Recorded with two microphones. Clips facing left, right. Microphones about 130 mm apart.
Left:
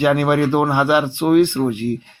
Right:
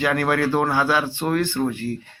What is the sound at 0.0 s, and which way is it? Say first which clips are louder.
Speech: left 5 dB; 20° left (ahead or behind).